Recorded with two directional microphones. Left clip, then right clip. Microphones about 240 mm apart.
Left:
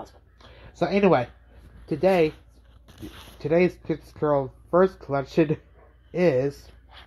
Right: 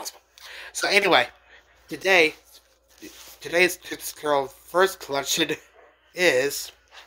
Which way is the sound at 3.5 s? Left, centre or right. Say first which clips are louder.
Right 1 dB; centre.